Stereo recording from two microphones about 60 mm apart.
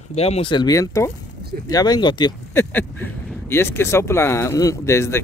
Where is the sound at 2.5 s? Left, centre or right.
Left.